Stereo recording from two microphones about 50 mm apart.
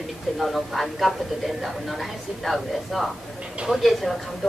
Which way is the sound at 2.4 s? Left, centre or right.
Centre.